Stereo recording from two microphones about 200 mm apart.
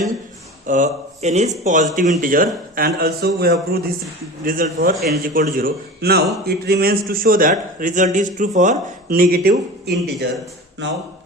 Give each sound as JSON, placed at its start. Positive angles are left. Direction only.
{"t": 0.7, "sound": "a man's voice", "side_deg": -35}